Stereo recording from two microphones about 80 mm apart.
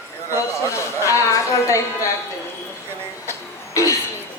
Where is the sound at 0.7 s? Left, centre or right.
Left.